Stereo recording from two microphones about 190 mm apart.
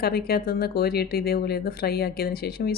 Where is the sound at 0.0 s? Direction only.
55° left (ahead or behind).